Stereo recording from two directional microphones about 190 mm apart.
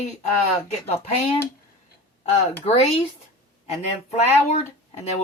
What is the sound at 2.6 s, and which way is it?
Speech, 35° left (ahead or behind).